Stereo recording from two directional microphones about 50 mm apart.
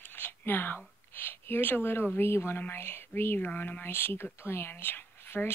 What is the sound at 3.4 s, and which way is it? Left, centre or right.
Speech, left.